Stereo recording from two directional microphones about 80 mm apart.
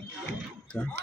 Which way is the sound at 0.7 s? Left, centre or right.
Centre.